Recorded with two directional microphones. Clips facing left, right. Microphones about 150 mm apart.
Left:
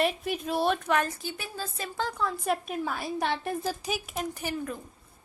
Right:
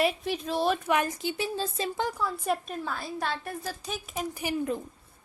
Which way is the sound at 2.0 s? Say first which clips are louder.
Even; 5° right (ahead or behind).